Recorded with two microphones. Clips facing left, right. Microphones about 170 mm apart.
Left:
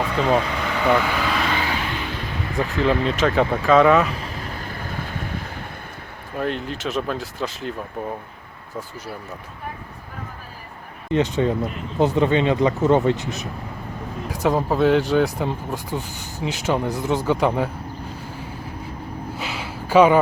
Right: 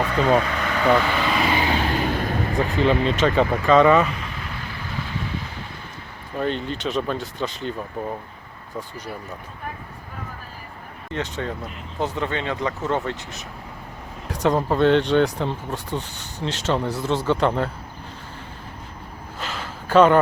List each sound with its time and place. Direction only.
0.0 s speech: 5° left (ahead or behind)
1.5 s vehicle: 20° right (ahead or behind)
1.8 s a sound: 45° right (ahead or behind)
2.7 s speech: centre (ahead or behind)
4.2 s vehicle: 40° left (ahead or behind)
6.3 s speech: centre (ahead or behind)
11.1 s speech: 15° left (ahead or behind)
19.4 s a sound: 10° left (ahead or behind)